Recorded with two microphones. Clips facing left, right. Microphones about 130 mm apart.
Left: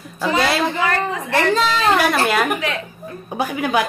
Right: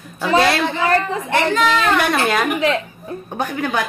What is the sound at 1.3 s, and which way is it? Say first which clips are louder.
Speech: right 1 dB; 35° left (ahead or behind).